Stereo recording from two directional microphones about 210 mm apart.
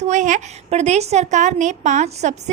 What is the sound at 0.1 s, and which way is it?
A woman's voice, 35° right (ahead or behind).